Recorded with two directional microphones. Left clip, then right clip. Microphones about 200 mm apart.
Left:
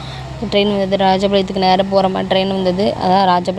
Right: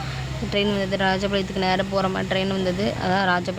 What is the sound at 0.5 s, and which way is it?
Speech, 20° left (ahead or behind).